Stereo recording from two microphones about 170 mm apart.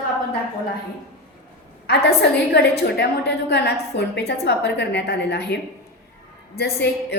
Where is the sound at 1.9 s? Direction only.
70° left (ahead or behind).